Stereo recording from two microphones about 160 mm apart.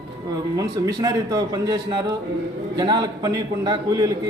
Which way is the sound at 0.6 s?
20° right (ahead or behind).